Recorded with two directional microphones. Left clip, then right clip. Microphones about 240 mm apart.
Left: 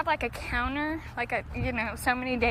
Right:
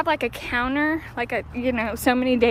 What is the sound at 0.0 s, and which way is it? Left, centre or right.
A woman's voice, centre.